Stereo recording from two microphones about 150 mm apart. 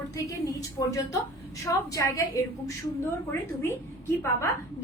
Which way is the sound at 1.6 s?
20° left (ahead or behind).